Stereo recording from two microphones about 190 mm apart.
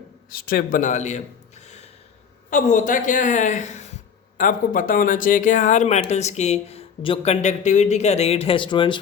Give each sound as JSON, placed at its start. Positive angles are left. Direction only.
{"t": 0.3, "sound": "speech", "side_deg": 50}
{"t": 1.6, "sound": "gasp", "side_deg": 35}
{"t": 2.5, "sound": "speech", "side_deg": 40}